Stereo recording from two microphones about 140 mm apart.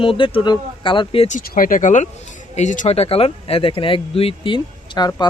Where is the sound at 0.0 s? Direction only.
40° left (ahead or behind).